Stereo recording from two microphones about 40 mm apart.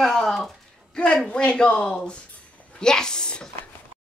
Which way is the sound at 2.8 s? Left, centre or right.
Centre.